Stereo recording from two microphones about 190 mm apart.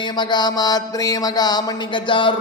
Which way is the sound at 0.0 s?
25° left (ahead or behind).